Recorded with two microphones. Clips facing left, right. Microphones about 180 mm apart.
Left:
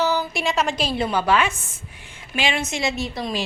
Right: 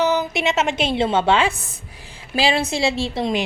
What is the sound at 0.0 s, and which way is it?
A woman's voice, 20° right (ahead or behind).